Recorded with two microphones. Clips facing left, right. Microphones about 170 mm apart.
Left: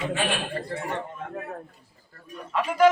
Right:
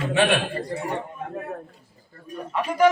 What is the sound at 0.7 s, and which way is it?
Speech, 15° right (ahead or behind).